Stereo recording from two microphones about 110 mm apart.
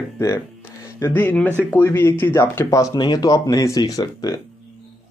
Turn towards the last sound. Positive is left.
turn(degrees=35)  # may be behind; listen again after turning